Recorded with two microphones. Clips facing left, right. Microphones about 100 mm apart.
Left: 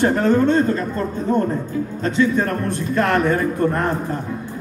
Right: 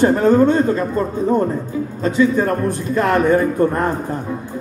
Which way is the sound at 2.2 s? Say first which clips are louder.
Right 3 dB; 15° right (ahead or behind).